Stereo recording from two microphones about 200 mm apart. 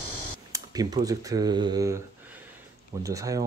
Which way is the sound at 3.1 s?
15° right (ahead or behind).